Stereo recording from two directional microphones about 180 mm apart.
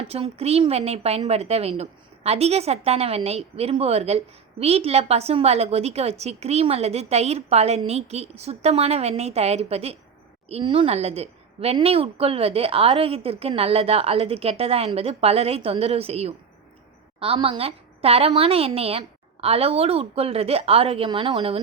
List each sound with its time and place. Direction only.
0.1 s a woman's voice: 35° right (ahead or behind)